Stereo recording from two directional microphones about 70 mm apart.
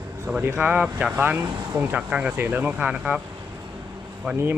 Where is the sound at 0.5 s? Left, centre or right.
Centre.